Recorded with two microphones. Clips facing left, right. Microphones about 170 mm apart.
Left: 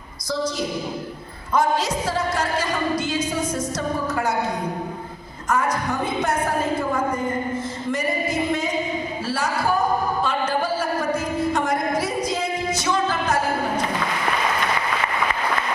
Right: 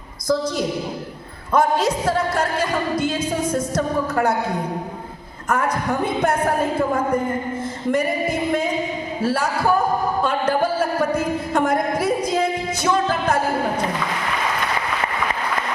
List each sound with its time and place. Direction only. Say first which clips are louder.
1.5 s speech: right 3 dB; 55° right (ahead or behind)
5.5 s speech: right 1 dB; 55° right (ahead or behind)
7.9 s singing: right 5 dB; 55° right (ahead or behind)
9.2 s speech: right 7 dB; 55° right (ahead or behind)
10.2 s a sound: right 3 dB; 55° right (ahead or behind)